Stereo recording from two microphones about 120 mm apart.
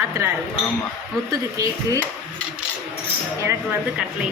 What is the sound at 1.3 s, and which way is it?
Speech, 30° right (ahead or behind).